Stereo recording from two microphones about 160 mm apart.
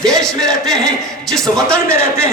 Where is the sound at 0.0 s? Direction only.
5° left (ahead or behind).